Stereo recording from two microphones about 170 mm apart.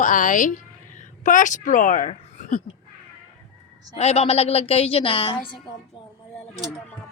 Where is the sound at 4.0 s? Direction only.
40° left (ahead or behind).